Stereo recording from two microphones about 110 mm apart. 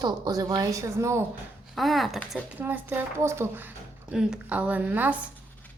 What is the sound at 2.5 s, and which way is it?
Speech, 15° right (ahead or behind).